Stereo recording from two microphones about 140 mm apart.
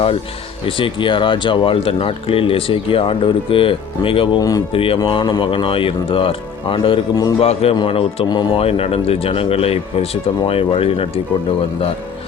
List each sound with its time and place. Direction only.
0.6 s speech: 40° left (ahead or behind)
4.4 s speech: 25° left (ahead or behind)
4.7 s speech: 40° left (ahead or behind)
7.4 s speech: 45° left (ahead or behind)